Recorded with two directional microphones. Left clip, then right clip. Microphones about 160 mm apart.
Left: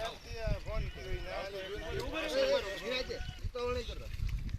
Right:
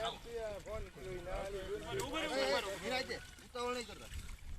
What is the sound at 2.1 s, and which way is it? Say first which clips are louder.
Boat: left 5 dB; 30° right (ahead or behind).